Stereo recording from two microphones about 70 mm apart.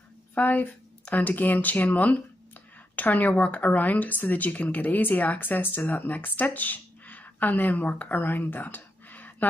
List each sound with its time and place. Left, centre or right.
0.3 s speech: left